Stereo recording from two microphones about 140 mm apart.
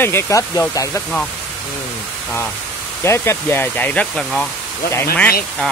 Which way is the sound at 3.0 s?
20° left (ahead or behind).